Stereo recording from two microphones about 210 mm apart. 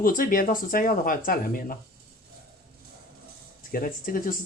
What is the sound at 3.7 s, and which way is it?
Speech, 40° left (ahead or behind).